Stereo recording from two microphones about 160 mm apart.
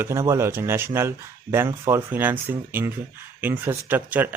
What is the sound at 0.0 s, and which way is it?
Speech, 20° right (ahead or behind).